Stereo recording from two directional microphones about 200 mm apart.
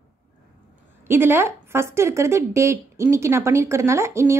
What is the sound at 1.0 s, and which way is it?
Speech, 10° right (ahead or behind).